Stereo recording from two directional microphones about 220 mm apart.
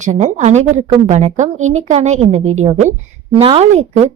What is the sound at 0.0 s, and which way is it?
A woman's voice, 35° right (ahead or behind).